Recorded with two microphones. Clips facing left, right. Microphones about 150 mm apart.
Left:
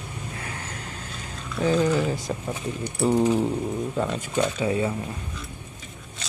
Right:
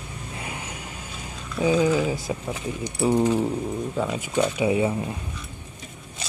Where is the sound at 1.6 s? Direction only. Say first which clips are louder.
Right 1 dB; 10° right (ahead or behind).